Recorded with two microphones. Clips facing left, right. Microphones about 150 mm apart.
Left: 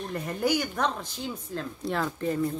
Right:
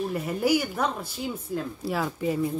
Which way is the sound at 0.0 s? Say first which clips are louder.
Right 3 dB; 5° right (ahead or behind).